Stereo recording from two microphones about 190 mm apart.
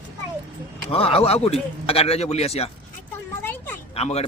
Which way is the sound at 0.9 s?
30° left (ahead or behind).